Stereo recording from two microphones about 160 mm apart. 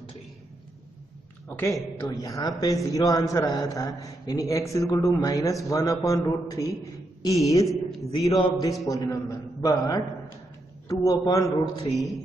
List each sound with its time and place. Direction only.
1.5 s a woman's voice: 15° left (ahead or behind)